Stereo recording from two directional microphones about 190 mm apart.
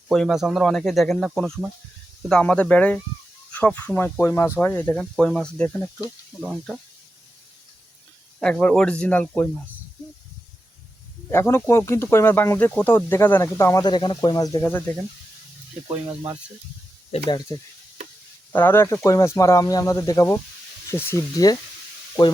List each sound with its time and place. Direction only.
0.1 s speech: centre (ahead or behind)
8.4 s speech: 5° left (ahead or behind)
11.3 s speech: 15° left (ahead or behind)
17.1 s speech: 25° left (ahead or behind)
18.5 s speech: 10° left (ahead or behind)